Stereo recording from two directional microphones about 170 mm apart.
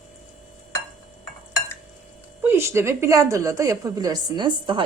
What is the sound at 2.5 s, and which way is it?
A woman's voice, 15° right (ahead or behind).